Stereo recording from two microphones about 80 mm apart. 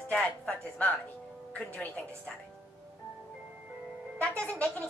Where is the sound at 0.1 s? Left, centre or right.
Centre.